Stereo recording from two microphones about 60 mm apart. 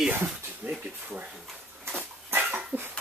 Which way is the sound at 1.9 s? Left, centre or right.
Right.